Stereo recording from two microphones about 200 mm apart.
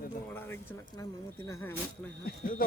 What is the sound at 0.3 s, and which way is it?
Speech, 10° left (ahead or behind).